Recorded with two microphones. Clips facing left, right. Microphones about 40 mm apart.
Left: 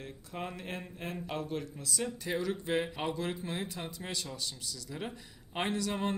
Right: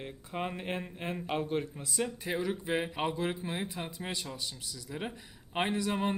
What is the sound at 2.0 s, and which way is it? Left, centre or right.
Speech, centre.